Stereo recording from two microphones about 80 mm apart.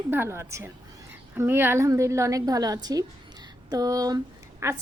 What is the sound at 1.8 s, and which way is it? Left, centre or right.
A woman's voice, right.